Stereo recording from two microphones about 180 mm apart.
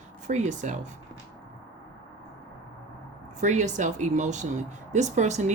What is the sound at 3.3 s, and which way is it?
Speech, 40° right (ahead or behind).